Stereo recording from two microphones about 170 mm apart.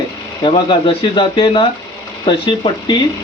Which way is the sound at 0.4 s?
30° left (ahead or behind).